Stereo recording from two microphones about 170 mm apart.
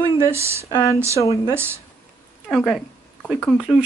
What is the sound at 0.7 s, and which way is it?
Speech, 20° left (ahead or behind).